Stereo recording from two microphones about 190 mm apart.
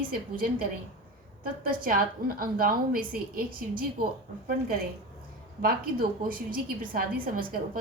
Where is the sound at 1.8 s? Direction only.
50° right (ahead or behind).